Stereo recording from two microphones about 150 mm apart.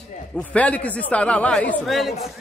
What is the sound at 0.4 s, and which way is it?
Speech, 10° left (ahead or behind).